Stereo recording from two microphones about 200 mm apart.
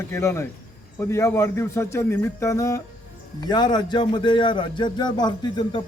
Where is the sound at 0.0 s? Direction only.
15° left (ahead or behind).